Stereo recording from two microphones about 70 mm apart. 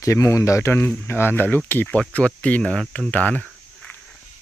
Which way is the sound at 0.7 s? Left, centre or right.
Left.